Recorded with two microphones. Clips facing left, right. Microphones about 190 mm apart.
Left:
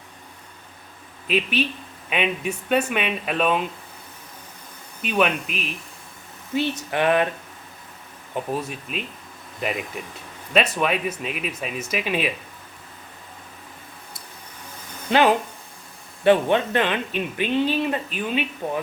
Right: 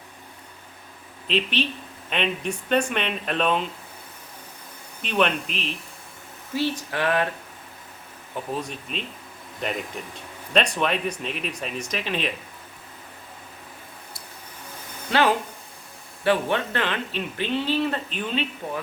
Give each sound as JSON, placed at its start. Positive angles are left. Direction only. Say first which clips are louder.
{"t": 1.3, "sound": "speech", "louder": "left 2 dB", "side_deg": 10}
{"t": 5.0, "sound": "speech", "louder": "left 1 dB", "side_deg": 5}
{"t": 6.5, "sound": "speech", "louder": "left 2 dB", "side_deg": 20}
{"t": 8.6, "sound": "speech", "louder": "left 2 dB", "side_deg": 5}
{"t": 15.1, "sound": "speech", "louder": "left 3 dB", "side_deg": 20}